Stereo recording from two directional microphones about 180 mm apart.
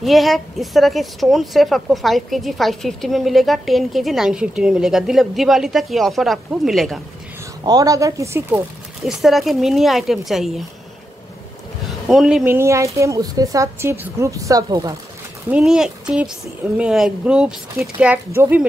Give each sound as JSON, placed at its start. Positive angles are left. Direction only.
{"t": 0.0, "sound": "a woman's voice", "side_deg": 0}
{"t": 7.6, "sound": "a woman's voice", "side_deg": -20}
{"t": 12.1, "sound": "a woman's voice", "side_deg": 0}
{"t": 12.5, "sound": "speech", "side_deg": -15}
{"t": 15.5, "sound": "a woman's voice", "side_deg": -5}